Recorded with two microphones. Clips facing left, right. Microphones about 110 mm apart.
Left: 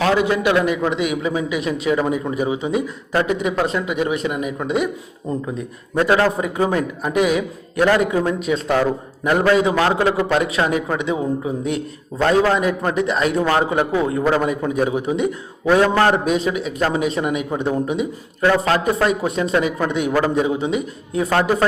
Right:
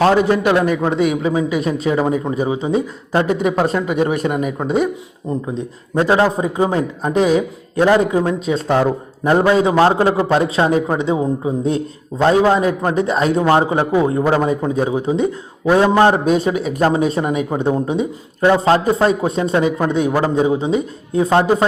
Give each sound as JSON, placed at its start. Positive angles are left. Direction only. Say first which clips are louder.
{"t": 0.0, "sound": "speech", "louder": "right 4 dB", "side_deg": -40}
{"t": 3.2, "sound": "speech", "louder": "right 3 dB", "side_deg": -40}
{"t": 5.3, "sound": "a man's voice", "louder": "right 2 dB", "side_deg": -20}
{"t": 7.9, "sound": "a man's voice", "louder": "right 3 dB", "side_deg": -20}
{"t": 13.4, "sound": "a man's voice", "louder": "right 3 dB", "side_deg": -20}
{"t": 15.6, "sound": "a man's voice", "louder": "right 3 dB", "side_deg": -20}
{"t": 16.2, "sound": "a man's voice", "louder": "right 4 dB", "side_deg": -35}